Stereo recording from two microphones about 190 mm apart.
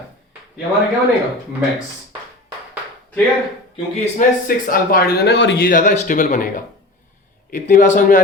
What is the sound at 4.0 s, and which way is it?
Speech, 45° left (ahead or behind).